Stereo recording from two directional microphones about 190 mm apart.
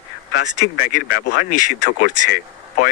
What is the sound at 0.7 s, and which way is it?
Speech, 50° left (ahead or behind).